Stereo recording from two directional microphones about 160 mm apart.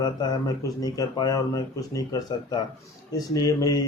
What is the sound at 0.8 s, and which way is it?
Speech, 25° left (ahead or behind).